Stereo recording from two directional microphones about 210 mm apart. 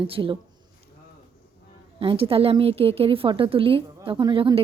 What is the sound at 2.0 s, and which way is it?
A woman's voice, 25° right (ahead or behind).